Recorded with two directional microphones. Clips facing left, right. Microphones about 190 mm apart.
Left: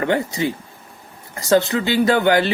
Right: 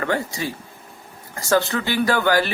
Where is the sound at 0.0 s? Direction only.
20° left (ahead or behind).